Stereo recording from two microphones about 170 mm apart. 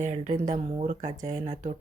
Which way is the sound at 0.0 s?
45° right (ahead or behind).